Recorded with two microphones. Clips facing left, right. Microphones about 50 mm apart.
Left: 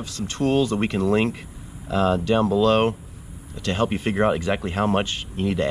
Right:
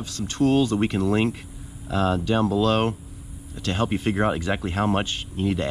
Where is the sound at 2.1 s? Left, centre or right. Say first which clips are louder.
Left 2 dB; centre.